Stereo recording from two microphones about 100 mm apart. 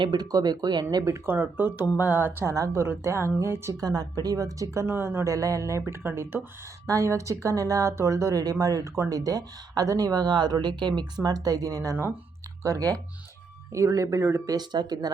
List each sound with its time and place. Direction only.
0.0 s speech: 45° right (ahead or behind)
1.1 s speech: 20° right (ahead or behind)
3.8 s speech: 40° right (ahead or behind); by 6.4 s 20° right (ahead or behind)
6.8 s speech: 35° right (ahead or behind)
13.7 s speech: 30° right (ahead or behind)
14.5 s speech: 45° right (ahead or behind)